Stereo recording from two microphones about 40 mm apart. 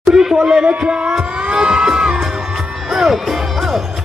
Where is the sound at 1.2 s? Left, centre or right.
Right.